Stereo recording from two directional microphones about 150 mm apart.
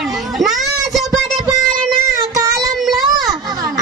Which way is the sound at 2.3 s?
25° right (ahead or behind).